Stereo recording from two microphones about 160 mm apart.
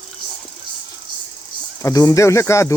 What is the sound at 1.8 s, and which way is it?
Speech, 20° left (ahead or behind).